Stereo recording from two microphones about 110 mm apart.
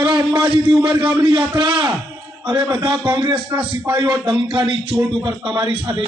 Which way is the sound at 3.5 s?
15° right (ahead or behind).